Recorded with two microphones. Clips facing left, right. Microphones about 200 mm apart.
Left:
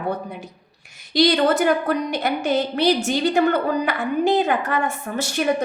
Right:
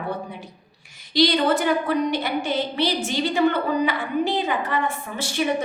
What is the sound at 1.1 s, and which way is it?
A woman's voice, 45° left (ahead or behind).